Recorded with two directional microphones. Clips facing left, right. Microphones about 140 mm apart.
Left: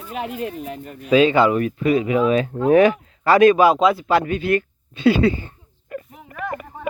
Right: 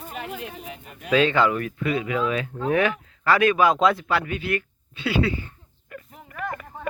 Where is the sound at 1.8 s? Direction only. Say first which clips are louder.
Left 7 dB; 35° left (ahead or behind).